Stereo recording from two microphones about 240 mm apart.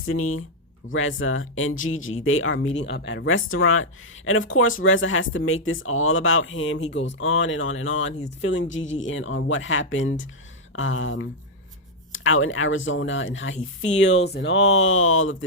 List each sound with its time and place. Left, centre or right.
0.0 s speech: left